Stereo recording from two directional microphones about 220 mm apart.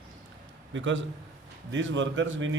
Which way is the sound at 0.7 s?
55° right (ahead or behind).